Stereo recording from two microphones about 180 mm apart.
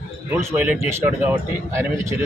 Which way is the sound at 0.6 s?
10° right (ahead or behind).